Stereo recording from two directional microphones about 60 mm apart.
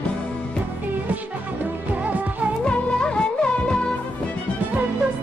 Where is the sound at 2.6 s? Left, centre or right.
Centre.